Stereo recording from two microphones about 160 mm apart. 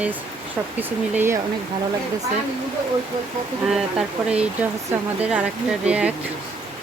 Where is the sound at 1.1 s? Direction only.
15° right (ahead or behind).